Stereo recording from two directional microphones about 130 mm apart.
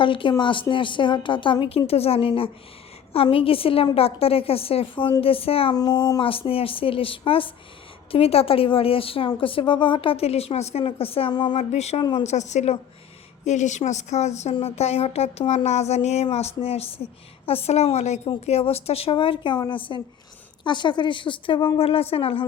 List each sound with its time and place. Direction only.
0.0 s a woman's voice: 40° left (ahead or behind)
5.7 s speech: 30° left (ahead or behind)
6.2 s a woman's voice: 45° left (ahead or behind)